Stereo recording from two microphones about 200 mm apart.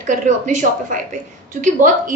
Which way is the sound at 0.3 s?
40° right (ahead or behind).